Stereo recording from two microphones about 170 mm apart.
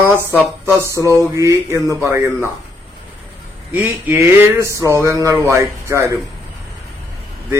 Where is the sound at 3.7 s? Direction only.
10° right (ahead or behind).